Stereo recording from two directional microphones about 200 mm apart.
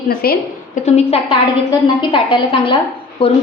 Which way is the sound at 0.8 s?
30° left (ahead or behind).